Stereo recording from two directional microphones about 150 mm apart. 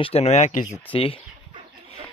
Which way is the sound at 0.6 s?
30° left (ahead or behind).